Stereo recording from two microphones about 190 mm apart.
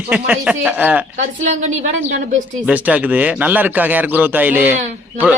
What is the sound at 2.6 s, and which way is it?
Speech, 5° right (ahead or behind).